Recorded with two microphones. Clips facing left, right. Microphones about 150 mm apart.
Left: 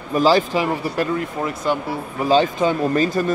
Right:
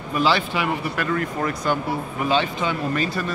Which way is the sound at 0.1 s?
40° left (ahead or behind).